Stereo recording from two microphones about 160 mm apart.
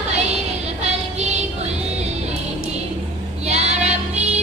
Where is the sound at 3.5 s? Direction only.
45° right (ahead or behind).